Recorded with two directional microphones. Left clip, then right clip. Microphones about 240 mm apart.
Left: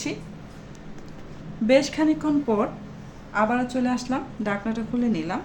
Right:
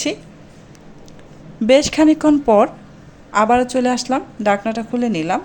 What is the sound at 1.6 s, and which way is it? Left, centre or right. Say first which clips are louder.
A woman's voice: right 7 dB; right.